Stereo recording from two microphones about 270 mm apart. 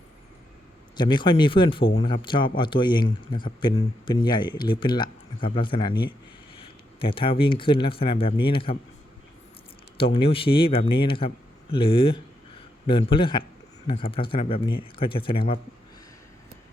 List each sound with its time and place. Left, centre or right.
0.9 s a man's voice: centre
10.0 s speech: centre